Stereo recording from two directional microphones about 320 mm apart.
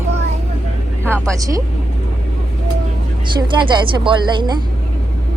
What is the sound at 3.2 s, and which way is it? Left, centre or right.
A woman's voice, centre.